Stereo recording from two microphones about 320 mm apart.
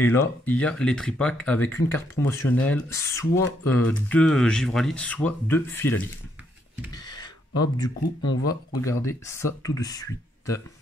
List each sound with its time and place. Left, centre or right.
0.0 s speech: centre
6.9 s a sound: centre
8.4 s speech: left
8.8 s speech: centre